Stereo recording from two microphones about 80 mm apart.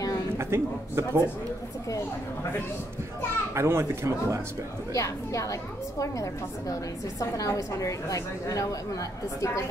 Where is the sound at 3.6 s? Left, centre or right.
Right.